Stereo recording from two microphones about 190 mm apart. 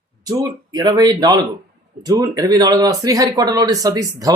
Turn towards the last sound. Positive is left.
turn(degrees=-20)  # may be behind; listen again after turning